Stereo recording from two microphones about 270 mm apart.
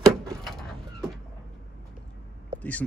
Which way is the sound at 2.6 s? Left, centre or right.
Centre.